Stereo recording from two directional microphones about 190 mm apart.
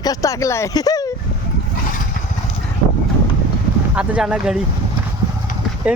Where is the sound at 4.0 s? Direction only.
5° right (ahead or behind).